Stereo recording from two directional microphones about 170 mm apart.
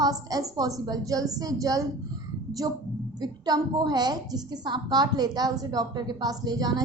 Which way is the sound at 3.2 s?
25° right (ahead or behind).